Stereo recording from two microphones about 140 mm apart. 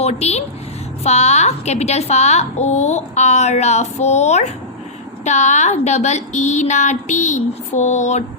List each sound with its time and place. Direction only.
0.0 s a woman's voice: 50° left (ahead or behind)